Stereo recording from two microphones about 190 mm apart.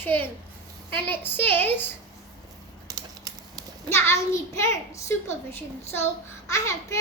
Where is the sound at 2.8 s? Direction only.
20° right (ahead or behind).